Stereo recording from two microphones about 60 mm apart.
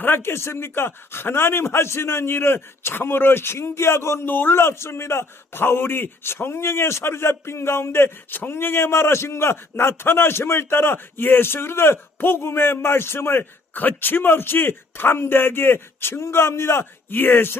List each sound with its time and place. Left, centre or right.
0.0 s speech: left
4.3 s a man's voice: left
13.7 s a man's voice: left